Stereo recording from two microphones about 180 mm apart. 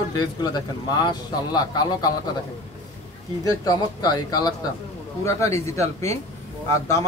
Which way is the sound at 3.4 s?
20° left (ahead or behind).